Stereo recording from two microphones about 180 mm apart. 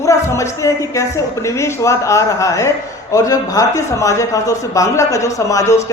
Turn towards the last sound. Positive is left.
turn(degrees=20)  # may be behind; listen again after turning